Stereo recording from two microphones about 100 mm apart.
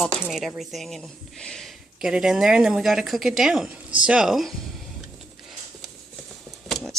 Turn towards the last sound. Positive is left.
turn(degrees=5)  # may be behind; listen again after turning